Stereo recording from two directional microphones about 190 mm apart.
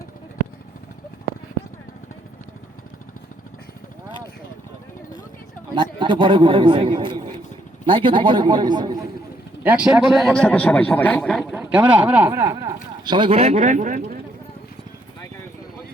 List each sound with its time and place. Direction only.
5.7 s speech: 25° right (ahead or behind)
9.6 s speech: 5° right (ahead or behind)
10.2 s speech: 5° left (ahead or behind)
11.8 s speech: 20° right (ahead or behind)
12.0 s speech: 10° right (ahead or behind); by 14.2 s 45° right (ahead or behind)